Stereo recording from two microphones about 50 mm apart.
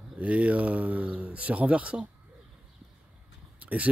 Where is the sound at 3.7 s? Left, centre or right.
Right.